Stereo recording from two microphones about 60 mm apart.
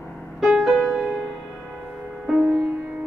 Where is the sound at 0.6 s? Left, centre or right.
Right.